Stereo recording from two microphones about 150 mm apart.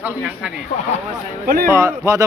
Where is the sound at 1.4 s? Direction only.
75° right (ahead or behind).